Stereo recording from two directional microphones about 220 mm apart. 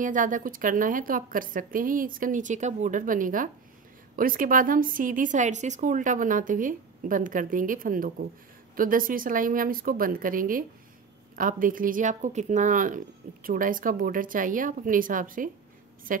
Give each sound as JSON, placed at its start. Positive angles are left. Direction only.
{"t": 0.0, "sound": "speech", "side_deg": -35}